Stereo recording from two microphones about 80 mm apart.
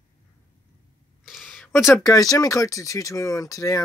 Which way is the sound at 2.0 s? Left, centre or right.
Left.